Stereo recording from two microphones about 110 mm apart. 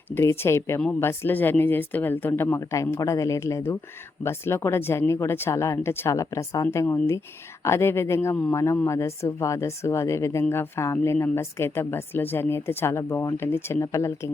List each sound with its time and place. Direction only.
0.1 s a woman's voice: 20° left (ahead or behind)